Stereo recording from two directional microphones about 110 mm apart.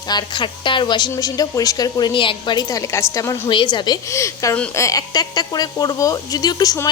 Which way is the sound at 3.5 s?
45° left (ahead or behind).